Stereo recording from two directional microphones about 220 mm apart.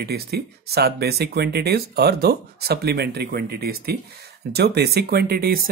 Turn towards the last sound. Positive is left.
turn(degrees=-40)  # may be behind; listen again after turning